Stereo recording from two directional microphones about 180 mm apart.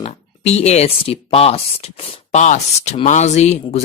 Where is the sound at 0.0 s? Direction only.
35° left (ahead or behind).